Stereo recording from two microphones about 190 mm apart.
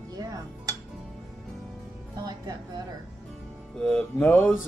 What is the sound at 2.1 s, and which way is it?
Speech, 20° right (ahead or behind).